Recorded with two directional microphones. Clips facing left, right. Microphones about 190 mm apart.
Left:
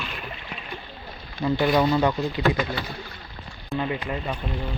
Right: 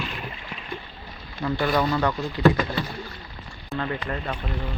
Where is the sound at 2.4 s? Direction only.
35° right (ahead or behind).